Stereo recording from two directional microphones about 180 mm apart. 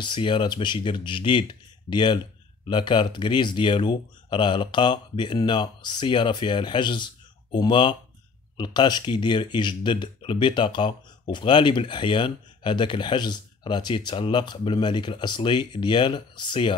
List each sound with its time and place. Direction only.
0.0 s speech: 25° left (ahead or behind)